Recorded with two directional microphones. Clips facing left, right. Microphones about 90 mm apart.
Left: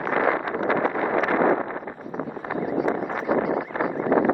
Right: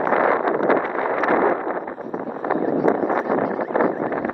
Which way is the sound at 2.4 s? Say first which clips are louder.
Right 6 dB; 40° right (ahead or behind).